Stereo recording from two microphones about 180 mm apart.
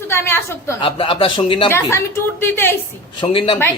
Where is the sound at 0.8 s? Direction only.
30° left (ahead or behind).